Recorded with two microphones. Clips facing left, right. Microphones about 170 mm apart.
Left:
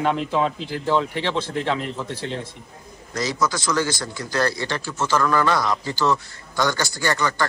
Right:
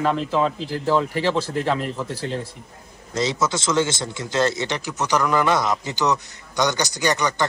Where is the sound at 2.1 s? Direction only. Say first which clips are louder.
Right 2 dB; 35° right (ahead or behind).